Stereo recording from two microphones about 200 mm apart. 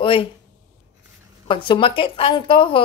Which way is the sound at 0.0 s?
25° left (ahead or behind).